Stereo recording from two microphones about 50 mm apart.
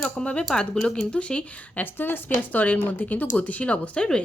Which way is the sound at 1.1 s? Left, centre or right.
Left.